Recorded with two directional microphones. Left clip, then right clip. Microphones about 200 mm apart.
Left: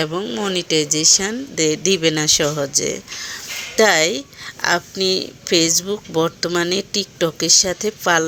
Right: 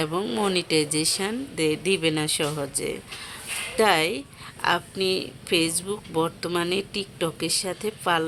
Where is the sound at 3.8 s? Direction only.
15° left (ahead or behind).